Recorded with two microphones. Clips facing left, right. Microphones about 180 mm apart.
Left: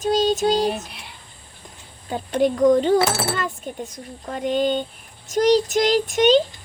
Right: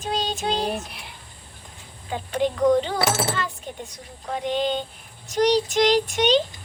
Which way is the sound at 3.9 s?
45° left (ahead or behind).